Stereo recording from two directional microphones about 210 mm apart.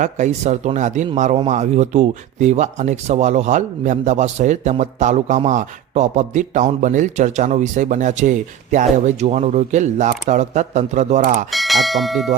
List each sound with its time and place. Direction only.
0.0 s speech: 35° right (ahead or behind)
11.5 s speech: centre (ahead or behind)